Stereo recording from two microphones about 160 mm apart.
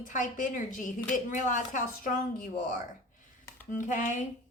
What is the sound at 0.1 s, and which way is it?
A woman's voice, 55° left (ahead or behind).